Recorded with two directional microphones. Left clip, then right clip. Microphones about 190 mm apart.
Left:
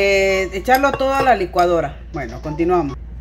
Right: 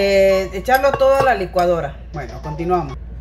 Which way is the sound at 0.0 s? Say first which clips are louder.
Right 2 dB; 65° left (ahead or behind).